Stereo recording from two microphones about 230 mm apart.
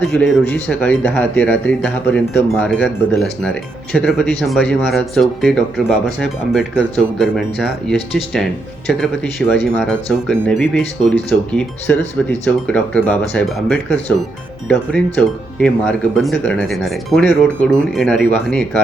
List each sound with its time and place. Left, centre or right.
0.0 s speech: centre
9.5 s speech: centre
12.5 s speech: centre